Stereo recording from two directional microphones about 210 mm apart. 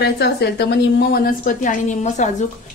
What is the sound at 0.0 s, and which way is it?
A woman's voice, 50° left (ahead or behind).